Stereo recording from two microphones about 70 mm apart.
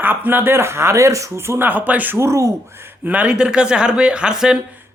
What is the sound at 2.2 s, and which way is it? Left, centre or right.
Speech, right.